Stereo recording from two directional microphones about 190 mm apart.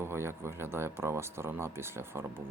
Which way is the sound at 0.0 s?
15° right (ahead or behind).